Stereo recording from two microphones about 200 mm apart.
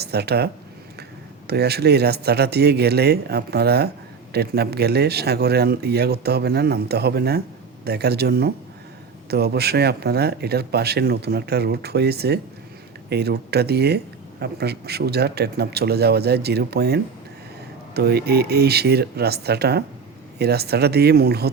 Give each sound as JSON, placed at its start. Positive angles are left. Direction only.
{"t": 0.0, "sound": "a man's voice", "side_deg": -55}